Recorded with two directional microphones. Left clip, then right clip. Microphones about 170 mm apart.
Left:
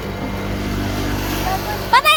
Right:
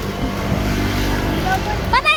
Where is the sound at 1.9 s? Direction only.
55° left (ahead or behind).